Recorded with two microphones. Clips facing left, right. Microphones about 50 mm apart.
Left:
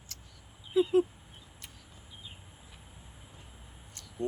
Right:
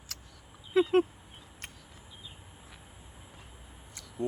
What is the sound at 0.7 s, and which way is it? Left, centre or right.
Speech, right.